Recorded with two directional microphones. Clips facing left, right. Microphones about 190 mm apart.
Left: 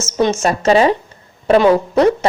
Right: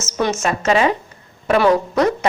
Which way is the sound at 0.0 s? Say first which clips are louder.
Left 4 dB; 30° left (ahead or behind).